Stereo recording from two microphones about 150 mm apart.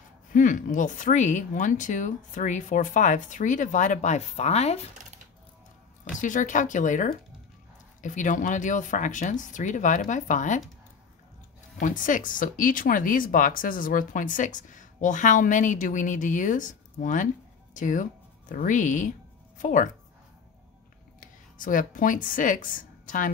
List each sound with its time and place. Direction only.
0.3 s speech: 60° left (ahead or behind); by 4.7 s 45° left (ahead or behind)
6.2 s speech: 60° left (ahead or behind)
11.8 s speech: 60° left (ahead or behind)
21.5 s speech: 65° left (ahead or behind)